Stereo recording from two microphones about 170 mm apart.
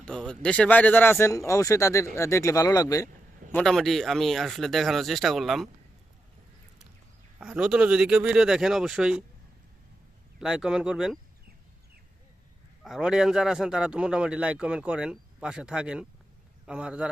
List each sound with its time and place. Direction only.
0.0 s speech: 5° left (ahead or behind); by 3.1 s 20° left (ahead or behind)
3.5 s speech: 5° left (ahead or behind)
7.3 s speech: 5° right (ahead or behind)
10.4 s speech: 5° right (ahead or behind)
12.8 s a man's voice: 5° right (ahead or behind)